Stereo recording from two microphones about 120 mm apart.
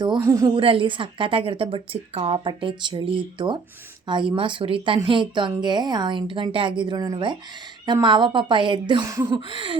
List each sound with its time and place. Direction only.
0.2 s a woman's voice: 25° right (ahead or behind)
0.5 s a woman's voice: 45° right (ahead or behind)
9.0 s a woman's voice: 30° right (ahead or behind)